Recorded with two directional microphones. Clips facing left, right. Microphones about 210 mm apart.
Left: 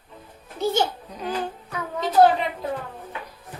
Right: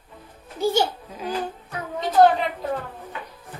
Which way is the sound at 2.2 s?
5° left (ahead or behind).